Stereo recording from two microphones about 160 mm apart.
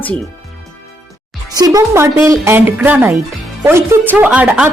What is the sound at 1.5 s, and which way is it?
Speech, 20° right (ahead or behind).